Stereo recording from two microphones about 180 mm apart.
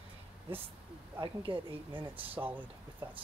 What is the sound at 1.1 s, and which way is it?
Speech, 25° right (ahead or behind).